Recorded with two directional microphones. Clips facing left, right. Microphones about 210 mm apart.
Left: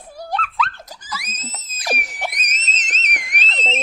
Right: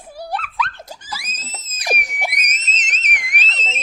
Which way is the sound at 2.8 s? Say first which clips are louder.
Right 1 dB; 35° left (ahead or behind).